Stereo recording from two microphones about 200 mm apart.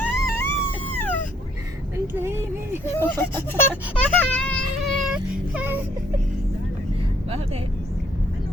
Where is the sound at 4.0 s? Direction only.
5° left (ahead or behind).